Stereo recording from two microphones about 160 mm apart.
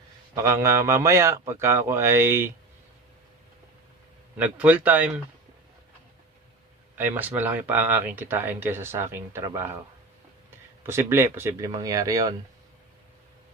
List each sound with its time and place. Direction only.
0.3 s speech: 15° right (ahead or behind)
4.4 s speech: 10° right (ahead or behind)
6.9 s speech: 10° right (ahead or behind)
10.8 s speech: 15° right (ahead or behind)